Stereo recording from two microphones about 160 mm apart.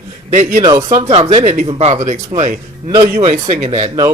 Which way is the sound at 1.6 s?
40° right (ahead or behind).